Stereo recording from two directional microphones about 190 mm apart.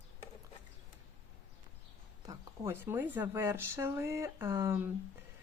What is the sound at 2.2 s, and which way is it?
Speech, 15° right (ahead or behind).